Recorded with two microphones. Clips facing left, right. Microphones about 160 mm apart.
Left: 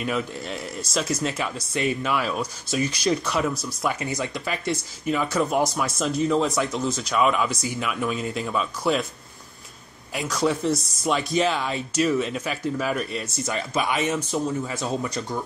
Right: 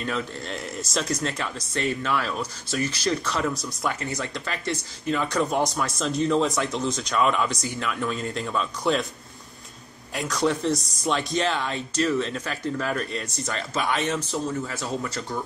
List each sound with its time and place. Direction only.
0.0 s speech: 10° left (ahead or behind)
10.1 s speech: centre (ahead or behind); by 15.2 s 20° left (ahead or behind)